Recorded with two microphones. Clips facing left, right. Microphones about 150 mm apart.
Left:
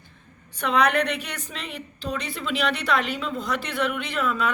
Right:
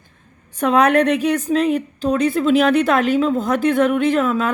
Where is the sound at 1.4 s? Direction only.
40° right (ahead or behind).